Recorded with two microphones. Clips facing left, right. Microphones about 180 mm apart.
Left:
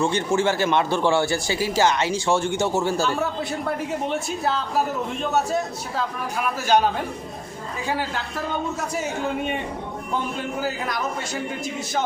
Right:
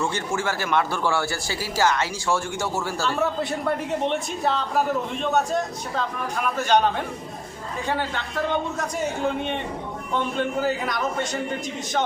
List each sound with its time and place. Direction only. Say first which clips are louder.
0.0 s speech: left 5 dB; 20° left (ahead or behind)
4.0 s a man's voice: even; 5° left (ahead or behind)